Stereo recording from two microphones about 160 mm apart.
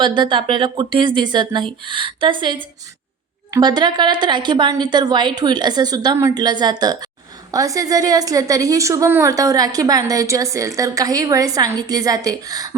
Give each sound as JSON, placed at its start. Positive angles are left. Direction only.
{"t": 0.0, "sound": "a woman's voice", "side_deg": -30}